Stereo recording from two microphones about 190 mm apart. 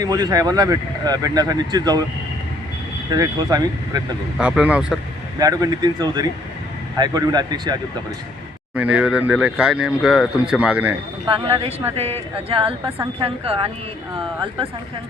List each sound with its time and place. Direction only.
0.0 s speech: 20° right (ahead or behind)
3.1 s speech: 20° right (ahead or behind)
4.4 s speech: 5° right (ahead or behind)
5.4 s speech: 20° right (ahead or behind)
8.7 s speech: 5° right (ahead or behind)
11.3 s speech: 25° right (ahead or behind)